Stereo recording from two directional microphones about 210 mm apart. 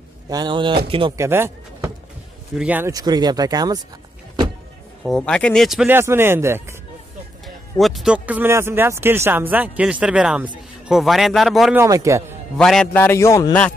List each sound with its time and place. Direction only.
0.3 s speech: 20° right (ahead or behind)
1.1 s speech: 10° right (ahead or behind)
5.0 s speech: 5° left (ahead or behind); by 6.7 s 10° right (ahead or behind)
7.8 s speech: centre (ahead or behind)
11.8 s speech: 15° right (ahead or behind)
12.5 s a man's voice: 5° left (ahead or behind)